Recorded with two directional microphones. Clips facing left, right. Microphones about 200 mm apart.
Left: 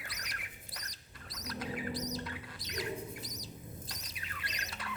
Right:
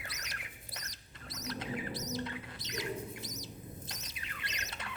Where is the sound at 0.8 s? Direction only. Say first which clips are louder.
Right 1 dB; 25° right (ahead or behind).